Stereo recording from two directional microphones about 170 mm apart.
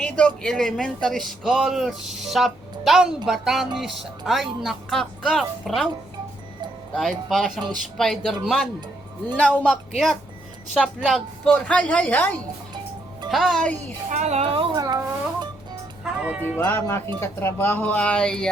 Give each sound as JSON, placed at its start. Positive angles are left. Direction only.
{"t": 0.0, "sound": "a man's voice", "side_deg": 5}
{"t": 6.9, "sound": "a man's voice", "side_deg": 0}
{"t": 9.6, "sound": "a man's voice", "side_deg": 0}
{"t": 14.1, "sound": "a woman's voice", "side_deg": -40}
{"t": 14.4, "sound": "speech", "side_deg": -30}
{"t": 16.0, "sound": "speech", "side_deg": -10}
{"t": 16.6, "sound": "a woman's voice", "side_deg": 15}